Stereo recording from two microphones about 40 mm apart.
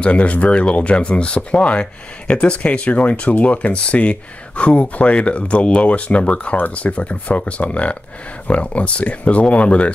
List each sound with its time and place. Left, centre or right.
0.0 s speech: left
2.6 s speech: left